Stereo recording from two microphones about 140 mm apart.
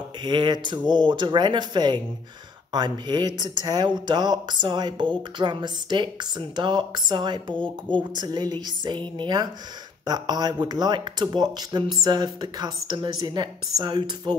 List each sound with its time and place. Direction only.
0.2 s speech: 35° right (ahead or behind)